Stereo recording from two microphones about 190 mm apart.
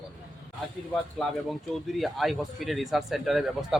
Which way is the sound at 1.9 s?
Centre (ahead or behind).